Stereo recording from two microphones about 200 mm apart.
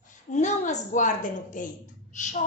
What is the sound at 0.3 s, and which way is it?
A woman's voice, 35° left (ahead or behind).